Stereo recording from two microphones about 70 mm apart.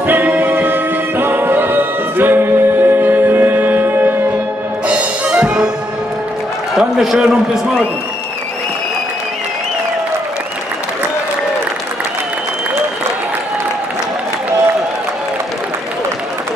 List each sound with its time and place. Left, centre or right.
0.0 s music: right
4.8 s music: centre
6.7 s a man's voice: centre